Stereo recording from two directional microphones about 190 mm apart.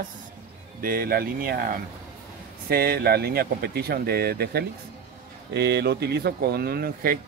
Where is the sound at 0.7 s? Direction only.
50° right (ahead or behind).